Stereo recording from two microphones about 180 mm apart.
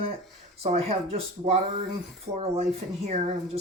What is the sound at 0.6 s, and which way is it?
Speech, 35° right (ahead or behind).